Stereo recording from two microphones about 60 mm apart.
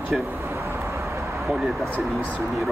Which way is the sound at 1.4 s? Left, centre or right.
Centre.